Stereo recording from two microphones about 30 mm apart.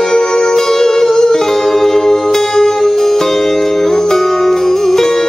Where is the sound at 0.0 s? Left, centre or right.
Centre.